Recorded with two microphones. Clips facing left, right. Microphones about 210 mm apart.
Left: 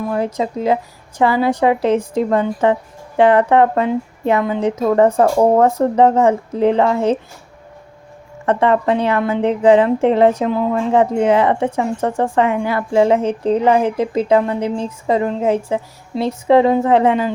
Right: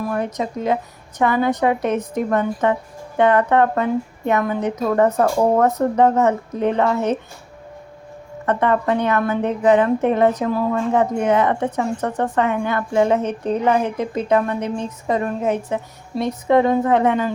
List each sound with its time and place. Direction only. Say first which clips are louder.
0.1 s a woman's voice: left 3 dB; 30° left (ahead or behind)
8.4 s a woman's voice: left 3 dB; 25° left (ahead or behind)